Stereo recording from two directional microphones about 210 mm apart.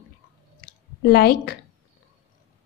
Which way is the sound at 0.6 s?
45° left (ahead or behind).